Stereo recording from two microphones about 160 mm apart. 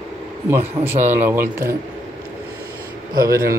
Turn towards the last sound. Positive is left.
turn(degrees=-65)  # may be behind; listen again after turning